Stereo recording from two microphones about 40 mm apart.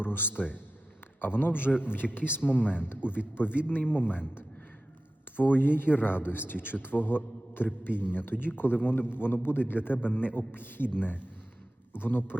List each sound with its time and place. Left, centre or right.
0.0 s a man's voice: left
5.4 s a man's voice: left